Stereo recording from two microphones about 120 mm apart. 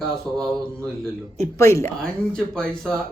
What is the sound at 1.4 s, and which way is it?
Speech, 25° left (ahead or behind).